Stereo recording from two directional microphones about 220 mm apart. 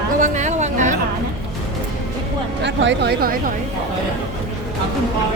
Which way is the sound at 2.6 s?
55° right (ahead or behind).